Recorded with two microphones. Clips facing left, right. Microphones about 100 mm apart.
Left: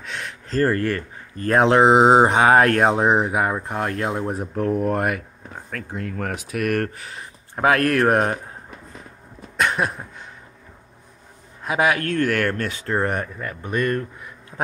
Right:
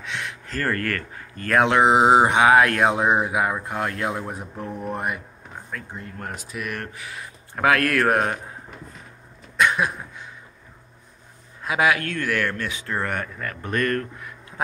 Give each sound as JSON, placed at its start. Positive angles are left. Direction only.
{"t": 0.0, "sound": "speech", "side_deg": 40}
{"t": 4.6, "sound": "speech", "side_deg": 90}
{"t": 7.1, "sound": "speech", "side_deg": 30}
{"t": 9.6, "sound": "a sound", "side_deg": 45}
{"t": 11.6, "sound": "speech", "side_deg": 40}